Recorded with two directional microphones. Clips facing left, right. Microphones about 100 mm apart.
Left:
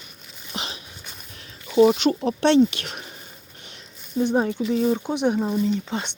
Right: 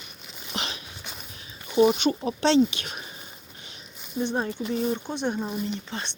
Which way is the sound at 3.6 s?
60° left (ahead or behind).